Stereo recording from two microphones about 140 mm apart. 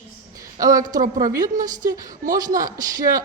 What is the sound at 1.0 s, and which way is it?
Speech, 65° right (ahead or behind).